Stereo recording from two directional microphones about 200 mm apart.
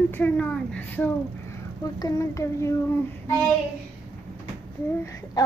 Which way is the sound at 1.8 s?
20° left (ahead or behind).